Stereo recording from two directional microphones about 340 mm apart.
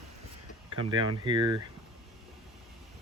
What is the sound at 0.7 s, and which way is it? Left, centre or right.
Speech, right.